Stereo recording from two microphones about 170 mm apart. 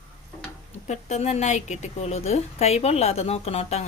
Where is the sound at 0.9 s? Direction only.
40° left (ahead or behind).